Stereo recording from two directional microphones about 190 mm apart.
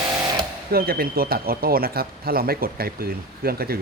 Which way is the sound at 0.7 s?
50° right (ahead or behind).